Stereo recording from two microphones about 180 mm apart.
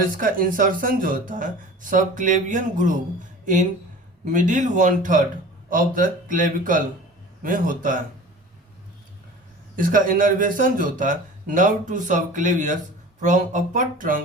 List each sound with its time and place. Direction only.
0.0 s speech: 50° right (ahead or behind)
9.7 s speech: 50° right (ahead or behind)